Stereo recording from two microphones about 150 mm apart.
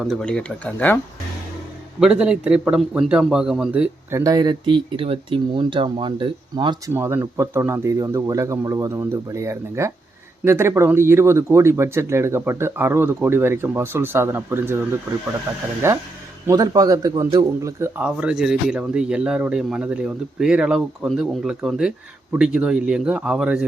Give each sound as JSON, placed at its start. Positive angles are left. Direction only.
{"t": 0.0, "sound": "speech", "side_deg": 0}
{"t": 2.0, "sound": "speech", "side_deg": -5}
{"t": 4.1, "sound": "speech", "side_deg": -25}
{"t": 6.9, "sound": "speech", "side_deg": -15}
{"t": 18.0, "sound": "speech", "side_deg": -5}